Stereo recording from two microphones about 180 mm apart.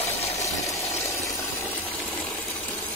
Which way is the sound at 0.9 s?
15° left (ahead or behind).